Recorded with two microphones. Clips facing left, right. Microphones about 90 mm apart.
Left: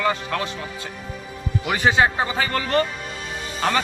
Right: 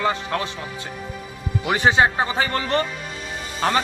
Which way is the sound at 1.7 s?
25° right (ahead or behind).